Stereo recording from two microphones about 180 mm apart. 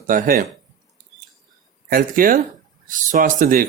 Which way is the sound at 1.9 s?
50° right (ahead or behind).